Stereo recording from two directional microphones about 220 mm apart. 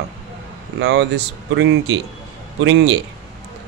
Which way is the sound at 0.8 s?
55° right (ahead or behind).